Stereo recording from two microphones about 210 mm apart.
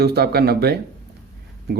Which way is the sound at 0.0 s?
50° right (ahead or behind).